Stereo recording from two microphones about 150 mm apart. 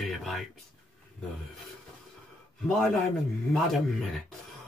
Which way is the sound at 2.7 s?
Centre (ahead or behind).